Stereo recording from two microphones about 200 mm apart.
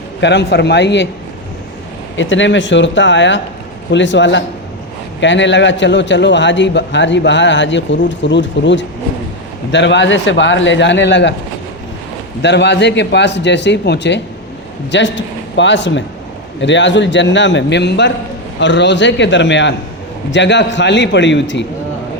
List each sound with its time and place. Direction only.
0.2 s a man's voice: 60° left (ahead or behind)
2.1 s a man's voice: 65° left (ahead or behind)
12.4 s a man's voice: 60° left (ahead or behind)